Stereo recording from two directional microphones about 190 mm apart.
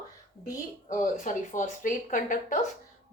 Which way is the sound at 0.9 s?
40° left (ahead or behind).